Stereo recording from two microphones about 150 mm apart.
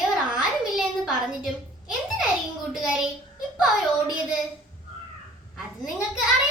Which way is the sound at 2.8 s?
5° right (ahead or behind).